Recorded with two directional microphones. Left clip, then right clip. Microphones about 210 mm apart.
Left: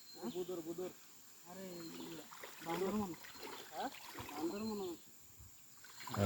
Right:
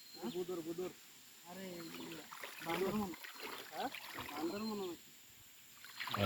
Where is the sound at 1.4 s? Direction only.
15° right (ahead or behind).